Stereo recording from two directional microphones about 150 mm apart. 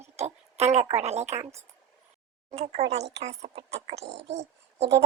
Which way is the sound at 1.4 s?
20° right (ahead or behind).